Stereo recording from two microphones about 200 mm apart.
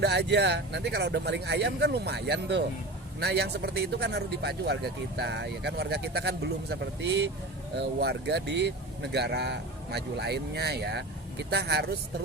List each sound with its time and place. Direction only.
0.0 s speech: 55° right (ahead or behind)